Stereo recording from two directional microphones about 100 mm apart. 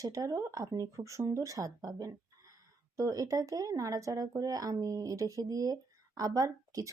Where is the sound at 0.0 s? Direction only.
35° right (ahead or behind).